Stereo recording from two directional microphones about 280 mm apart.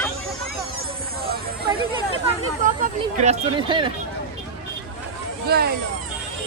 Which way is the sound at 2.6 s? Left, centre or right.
Right.